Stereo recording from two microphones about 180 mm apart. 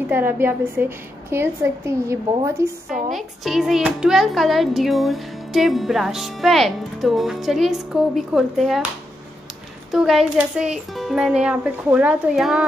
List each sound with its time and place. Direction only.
0.1 s a woman's voice: 10° right (ahead or behind)
3.1 s a child's voice: centre (ahead or behind)
9.8 s a child's voice: centre (ahead or behind)